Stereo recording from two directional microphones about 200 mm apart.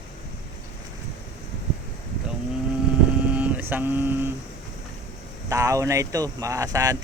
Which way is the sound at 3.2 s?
5° right (ahead or behind).